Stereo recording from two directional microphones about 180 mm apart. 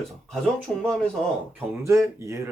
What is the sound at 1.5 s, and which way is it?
Speech, 15° right (ahead or behind).